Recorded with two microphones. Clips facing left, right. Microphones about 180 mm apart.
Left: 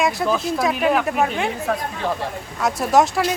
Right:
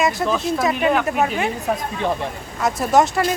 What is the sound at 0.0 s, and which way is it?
Speech, centre (ahead or behind).